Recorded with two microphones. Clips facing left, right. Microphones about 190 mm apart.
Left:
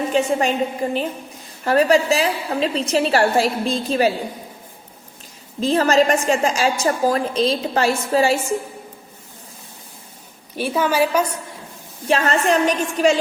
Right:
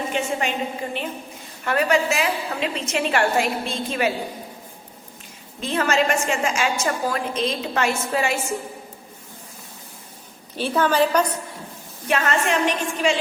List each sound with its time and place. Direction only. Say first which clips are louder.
0.1 s a woman's voice: left 8 dB; 35° left (ahead or behind)
1.6 s a woman's voice: left 5 dB; 35° left (ahead or behind)
5.5 s a woman's voice: left 6 dB; 35° left (ahead or behind)
10.6 s a woman's voice: left 1 dB; 10° left (ahead or behind)
12.0 s a woman's voice: left 4 dB; 30° left (ahead or behind)